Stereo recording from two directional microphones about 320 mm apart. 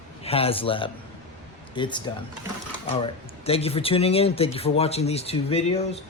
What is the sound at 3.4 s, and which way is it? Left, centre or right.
Speech, centre.